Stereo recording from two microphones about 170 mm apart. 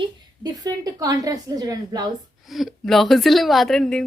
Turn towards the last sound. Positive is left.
turn(degrees=5)  # may be behind; listen again after turning